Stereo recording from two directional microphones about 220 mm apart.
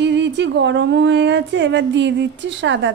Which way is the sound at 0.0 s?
55° right (ahead or behind).